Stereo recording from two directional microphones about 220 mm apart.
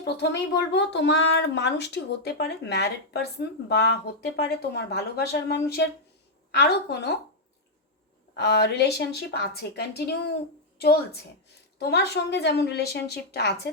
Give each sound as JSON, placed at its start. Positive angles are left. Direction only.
{"t": 0.2, "sound": "speech", "side_deg": 50}
{"t": 8.4, "sound": "a woman's voice", "side_deg": 50}